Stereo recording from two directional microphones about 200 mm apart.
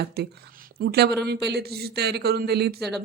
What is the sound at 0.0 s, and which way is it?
A woman's voice, 55° right (ahead or behind).